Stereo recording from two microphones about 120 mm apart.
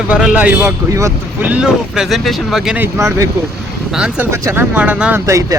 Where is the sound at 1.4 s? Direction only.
10° right (ahead or behind).